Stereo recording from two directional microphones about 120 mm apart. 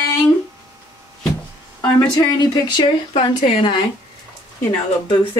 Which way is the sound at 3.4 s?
50° left (ahead or behind).